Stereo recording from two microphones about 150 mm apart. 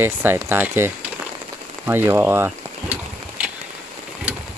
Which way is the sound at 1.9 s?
15° right (ahead or behind).